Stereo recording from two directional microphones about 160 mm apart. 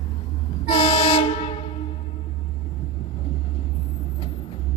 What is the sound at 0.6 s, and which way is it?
Train, 35° left (ahead or behind).